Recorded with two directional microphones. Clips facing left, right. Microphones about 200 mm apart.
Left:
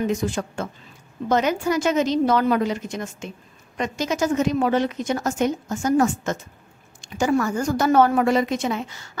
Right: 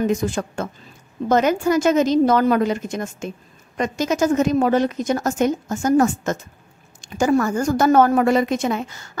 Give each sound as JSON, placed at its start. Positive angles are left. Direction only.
{"t": 0.3, "sound": "a woman's voice", "side_deg": -50}